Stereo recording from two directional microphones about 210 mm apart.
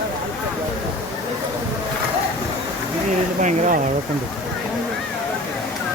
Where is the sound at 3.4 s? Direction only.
35° right (ahead or behind).